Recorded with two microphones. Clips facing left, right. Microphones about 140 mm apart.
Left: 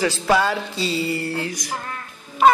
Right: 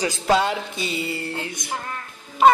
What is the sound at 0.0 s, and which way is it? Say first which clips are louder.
Music: left 1 dB; 20° right (ahead or behind).